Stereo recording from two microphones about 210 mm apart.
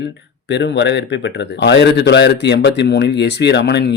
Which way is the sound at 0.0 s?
55° left (ahead or behind).